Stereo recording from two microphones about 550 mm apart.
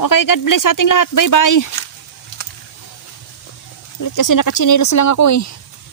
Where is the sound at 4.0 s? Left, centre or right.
Left.